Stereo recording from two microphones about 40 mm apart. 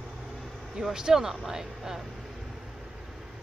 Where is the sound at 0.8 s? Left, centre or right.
Centre.